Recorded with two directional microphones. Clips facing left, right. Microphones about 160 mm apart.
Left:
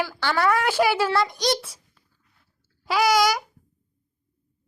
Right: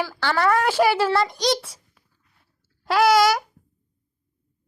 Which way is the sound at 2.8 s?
Centre (ahead or behind).